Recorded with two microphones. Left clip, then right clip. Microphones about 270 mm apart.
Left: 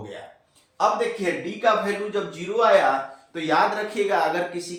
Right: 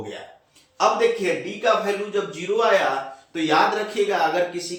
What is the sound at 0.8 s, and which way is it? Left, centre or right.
Speech, left.